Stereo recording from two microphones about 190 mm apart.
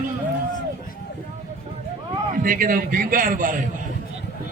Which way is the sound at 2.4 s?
45° right (ahead or behind).